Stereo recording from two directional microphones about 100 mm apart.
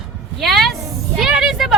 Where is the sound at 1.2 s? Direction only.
5° right (ahead or behind).